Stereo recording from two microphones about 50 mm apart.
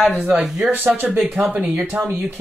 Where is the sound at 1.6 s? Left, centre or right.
Right.